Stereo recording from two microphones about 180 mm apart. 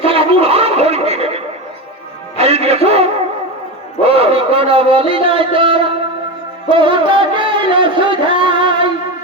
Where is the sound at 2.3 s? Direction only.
35° right (ahead or behind).